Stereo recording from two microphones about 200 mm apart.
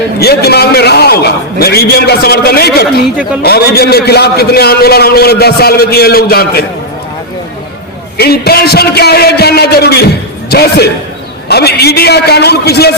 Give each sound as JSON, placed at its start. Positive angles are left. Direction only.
{"t": 0.2, "sound": "a man's voice", "side_deg": 50}
{"t": 8.2, "sound": "a man's voice", "side_deg": 50}